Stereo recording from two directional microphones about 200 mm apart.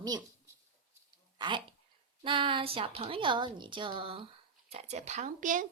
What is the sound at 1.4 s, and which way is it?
A woman's voice, 25° right (ahead or behind).